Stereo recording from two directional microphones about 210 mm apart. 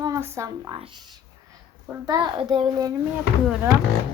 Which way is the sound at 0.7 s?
25° right (ahead or behind).